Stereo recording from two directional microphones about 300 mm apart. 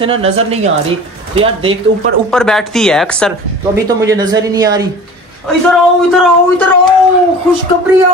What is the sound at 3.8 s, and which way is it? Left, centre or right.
Speech, centre.